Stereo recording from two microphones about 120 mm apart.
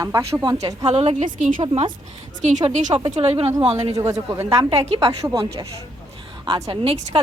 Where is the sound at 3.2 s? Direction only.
50° right (ahead or behind).